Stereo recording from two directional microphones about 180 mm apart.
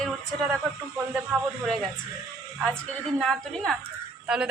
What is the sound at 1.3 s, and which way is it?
Speech, centre (ahead or behind).